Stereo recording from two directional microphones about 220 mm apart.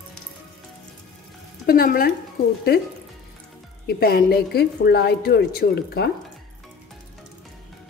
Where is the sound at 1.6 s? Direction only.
40° left (ahead or behind).